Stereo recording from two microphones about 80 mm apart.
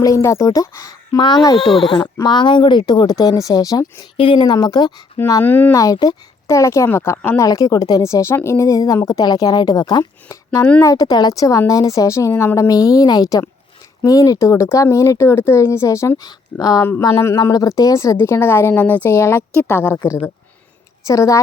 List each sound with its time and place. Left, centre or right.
0.0 s speech: left
2.2 s speech: left
3.1 s speech: left
4.2 s speech: left
5.4 s a woman's voice: left
5.7 s speech: left
6.5 s speech: left
7.3 s speech: left
10.2 s speech: left
10.8 s speech: left
12.5 s speech: left
16.2 s a woman's voice: left
21.1 s speech: left